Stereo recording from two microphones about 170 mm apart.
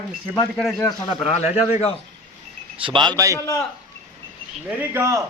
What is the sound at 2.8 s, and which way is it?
Speech, 30° right (ahead or behind).